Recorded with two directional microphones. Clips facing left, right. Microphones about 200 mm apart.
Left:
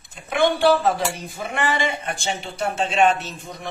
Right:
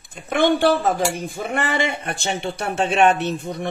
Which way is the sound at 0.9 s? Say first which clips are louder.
Right 4 dB; 55° right (ahead or behind).